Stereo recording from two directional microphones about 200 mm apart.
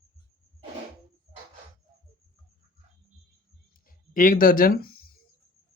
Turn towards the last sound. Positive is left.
turn(degrees=50)  # may be behind; listen again after turning